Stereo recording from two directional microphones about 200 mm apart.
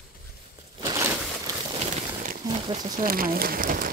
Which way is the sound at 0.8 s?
20° right (ahead or behind).